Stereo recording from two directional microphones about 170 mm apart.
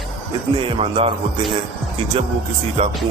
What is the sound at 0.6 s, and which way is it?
Speech, 35° right (ahead or behind).